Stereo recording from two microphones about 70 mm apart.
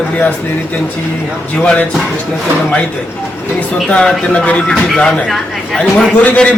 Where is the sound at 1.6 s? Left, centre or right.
Centre.